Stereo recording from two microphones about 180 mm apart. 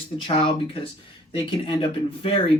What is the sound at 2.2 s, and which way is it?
Speech, 30° left (ahead or behind).